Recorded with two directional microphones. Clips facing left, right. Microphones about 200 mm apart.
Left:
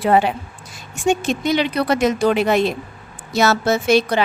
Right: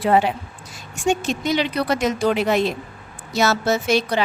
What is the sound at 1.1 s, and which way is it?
A woman's voice, 55° left (ahead or behind).